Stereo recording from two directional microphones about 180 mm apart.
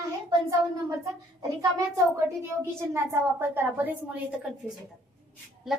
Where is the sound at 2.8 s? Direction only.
15° right (ahead or behind).